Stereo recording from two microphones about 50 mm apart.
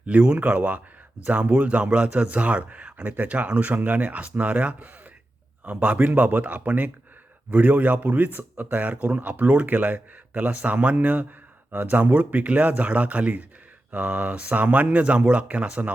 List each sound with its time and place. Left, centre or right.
0.0 s a man's voice: right